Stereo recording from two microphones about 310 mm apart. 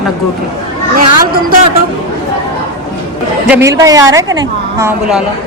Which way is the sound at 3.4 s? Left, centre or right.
Centre.